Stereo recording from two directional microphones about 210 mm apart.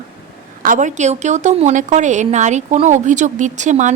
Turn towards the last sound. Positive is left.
turn(degrees=-35)  # may be behind; listen again after turning